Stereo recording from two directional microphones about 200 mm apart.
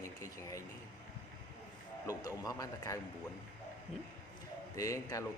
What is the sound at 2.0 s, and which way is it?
Speech, 20° left (ahead or behind).